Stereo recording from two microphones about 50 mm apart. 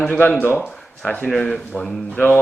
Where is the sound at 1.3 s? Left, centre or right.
Centre.